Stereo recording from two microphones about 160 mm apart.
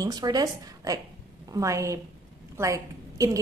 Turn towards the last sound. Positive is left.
turn(degrees=-20)  # may be behind; listen again after turning